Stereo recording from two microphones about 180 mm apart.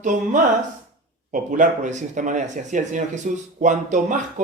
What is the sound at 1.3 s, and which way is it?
Speech, 45° right (ahead or behind).